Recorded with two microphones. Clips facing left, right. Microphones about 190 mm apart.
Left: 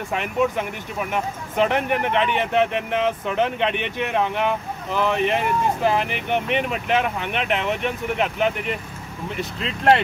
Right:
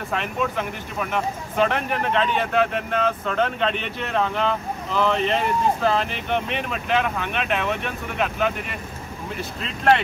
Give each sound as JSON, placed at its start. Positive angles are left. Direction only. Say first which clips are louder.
{"t": 0.1, "sound": "speech", "louder": "left 4 dB", "side_deg": 15}